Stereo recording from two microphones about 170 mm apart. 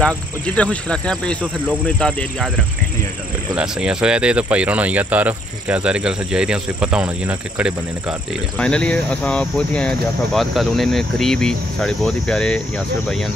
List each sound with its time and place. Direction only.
0.6 s speech: 5° left (ahead or behind)
3.5 s speech: 5° right (ahead or behind)
8.5 s speech: 5° left (ahead or behind)